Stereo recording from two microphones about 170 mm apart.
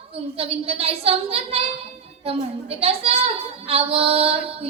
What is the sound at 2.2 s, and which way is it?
Child singing, 35° right (ahead or behind).